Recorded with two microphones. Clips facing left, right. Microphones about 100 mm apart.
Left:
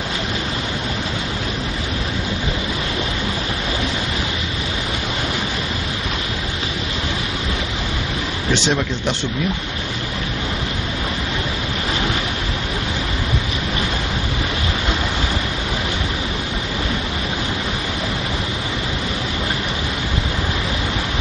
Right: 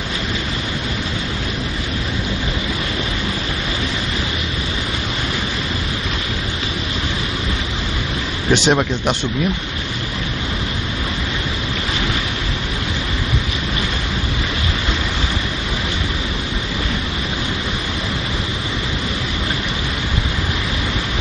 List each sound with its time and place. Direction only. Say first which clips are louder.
8.6 s speech: right 4 dB; 55° right (ahead or behind)